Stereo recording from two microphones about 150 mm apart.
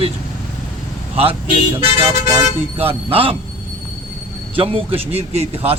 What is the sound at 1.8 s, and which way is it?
A man's voice, 40° right (ahead or behind).